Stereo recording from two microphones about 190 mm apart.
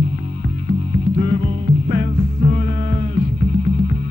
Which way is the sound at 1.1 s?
35° right (ahead or behind).